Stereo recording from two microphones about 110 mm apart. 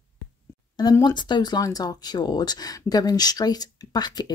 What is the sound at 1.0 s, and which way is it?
Speech, 40° left (ahead or behind).